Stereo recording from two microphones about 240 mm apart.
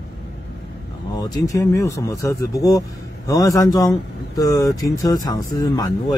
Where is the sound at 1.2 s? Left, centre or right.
Centre.